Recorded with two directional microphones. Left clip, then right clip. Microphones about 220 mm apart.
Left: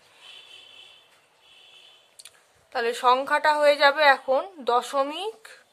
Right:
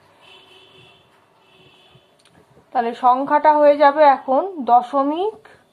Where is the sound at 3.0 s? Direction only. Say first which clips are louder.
Right 5 dB; 30° left (ahead or behind).